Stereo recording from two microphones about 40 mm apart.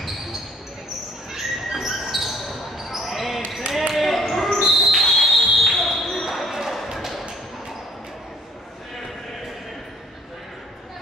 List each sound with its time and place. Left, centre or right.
1.3 s basketball bounce: centre
6.9 s music: centre